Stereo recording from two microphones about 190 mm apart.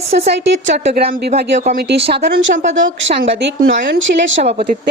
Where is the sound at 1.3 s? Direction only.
40° right (ahead or behind).